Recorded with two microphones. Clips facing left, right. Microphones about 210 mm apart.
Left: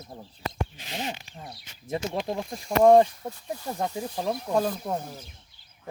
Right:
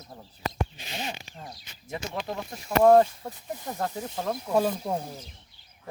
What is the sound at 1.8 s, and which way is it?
Speech, 30° left (ahead or behind).